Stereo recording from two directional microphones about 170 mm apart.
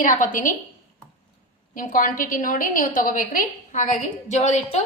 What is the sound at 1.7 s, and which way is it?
A woman's voice, 50° left (ahead or behind).